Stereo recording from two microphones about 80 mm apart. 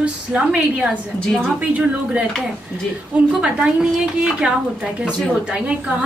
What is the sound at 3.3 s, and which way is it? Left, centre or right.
A woman's voice, centre.